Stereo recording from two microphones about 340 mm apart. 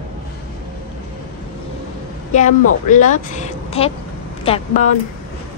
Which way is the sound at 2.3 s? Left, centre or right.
Left.